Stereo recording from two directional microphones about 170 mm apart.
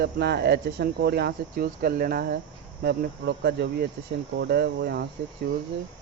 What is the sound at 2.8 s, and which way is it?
Speech, 70° right (ahead or behind).